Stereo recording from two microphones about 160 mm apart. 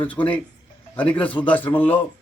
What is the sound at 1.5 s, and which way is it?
Speech, 10° left (ahead or behind).